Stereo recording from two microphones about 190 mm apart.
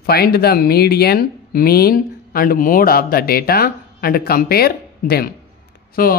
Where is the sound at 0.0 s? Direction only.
55° left (ahead or behind).